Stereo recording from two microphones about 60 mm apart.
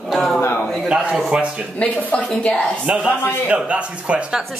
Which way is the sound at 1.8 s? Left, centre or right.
Left.